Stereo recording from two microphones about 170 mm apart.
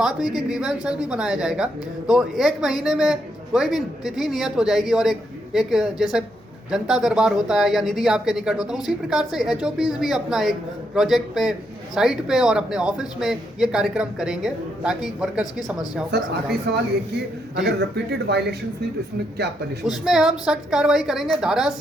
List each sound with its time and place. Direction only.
0.0 s a woman's voice: centre (ahead or behind)
16.7 s speech: 70° right (ahead or behind)
17.7 s speech: 85° right
19.8 s a woman's voice: centre (ahead or behind)